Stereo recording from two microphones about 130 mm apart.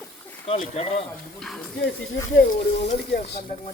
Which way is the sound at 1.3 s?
5° left (ahead or behind).